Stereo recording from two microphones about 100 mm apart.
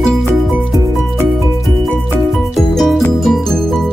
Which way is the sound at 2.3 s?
5° left (ahead or behind).